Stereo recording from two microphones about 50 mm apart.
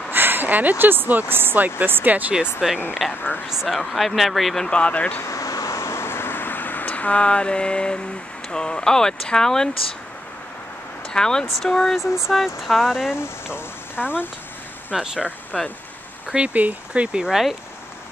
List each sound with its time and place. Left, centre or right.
0.1 s speech: right
2.6 s speech: centre
3.1 s speech: left
3.6 s speech: centre
4.6 s speech: left
5.2 s vehicle: left; by 8.0 s centre
8.5 s speech: centre
11.1 s speech: centre
13.1 s speech: left
14.9 s speech: right
15.5 s speech: centre
16.3 s speech: right